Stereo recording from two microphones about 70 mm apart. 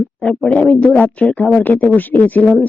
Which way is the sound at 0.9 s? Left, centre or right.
Left.